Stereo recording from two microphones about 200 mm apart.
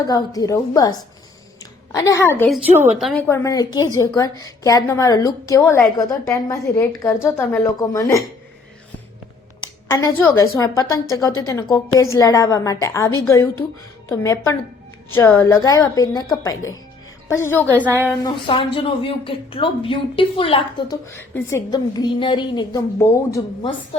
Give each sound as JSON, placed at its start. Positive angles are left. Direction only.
{"t": 0.1, "sound": "a woman's voice", "side_deg": 20}
{"t": 9.6, "sound": "a sound", "side_deg": 15}
{"t": 10.6, "sound": "a woman's voice", "side_deg": 15}
{"t": 17.8, "sound": "a woman's voice", "side_deg": -10}
{"t": 18.2, "sound": "a woman's voice", "side_deg": 25}
{"t": 23.9, "sound": "a woman's voice", "side_deg": 30}